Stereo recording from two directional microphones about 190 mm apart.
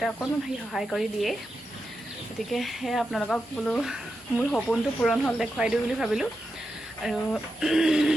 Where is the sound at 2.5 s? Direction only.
Centre (ahead or behind).